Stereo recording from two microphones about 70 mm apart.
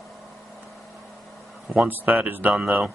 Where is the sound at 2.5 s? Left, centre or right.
Centre.